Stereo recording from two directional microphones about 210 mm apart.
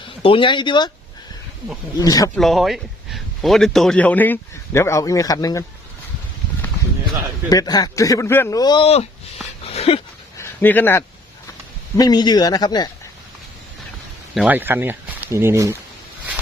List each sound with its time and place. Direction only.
0.2 s speech: 25° left (ahead or behind)
2.0 s a man's voice: 15° left (ahead or behind)
2.3 s a man's voice: centre (ahead or behind); by 5.6 s 15° left (ahead or behind)
7.5 s speech: 20° left (ahead or behind)
9.6 s a sound: 30° left (ahead or behind)
10.3 s dog: 10° left (ahead or behind)
11.9 s speech: 20° left (ahead or behind)
14.3 s speech: 5° right (ahead or behind)